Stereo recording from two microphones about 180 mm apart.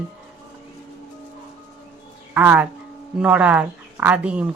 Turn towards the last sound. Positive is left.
turn(degrees=-5)  # may be behind; listen again after turning